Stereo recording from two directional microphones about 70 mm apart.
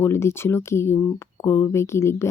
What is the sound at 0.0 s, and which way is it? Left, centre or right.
Speech, left.